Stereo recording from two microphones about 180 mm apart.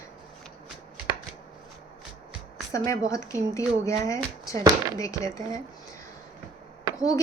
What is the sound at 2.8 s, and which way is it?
Speech, 15° left (ahead or behind).